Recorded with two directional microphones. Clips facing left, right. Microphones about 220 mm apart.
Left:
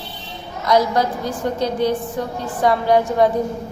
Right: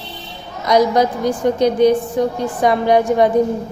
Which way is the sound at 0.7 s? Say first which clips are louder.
Right 3 dB; 15° right (ahead or behind).